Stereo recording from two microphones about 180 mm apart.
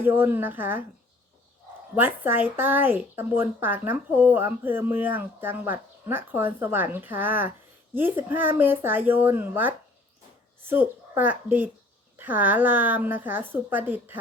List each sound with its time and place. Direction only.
0.0 s speech: 10° right (ahead or behind)
2.0 s speech: 10° right (ahead or behind)